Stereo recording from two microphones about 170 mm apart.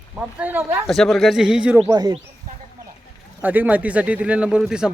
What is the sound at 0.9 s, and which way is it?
Speech, centre (ahead or behind).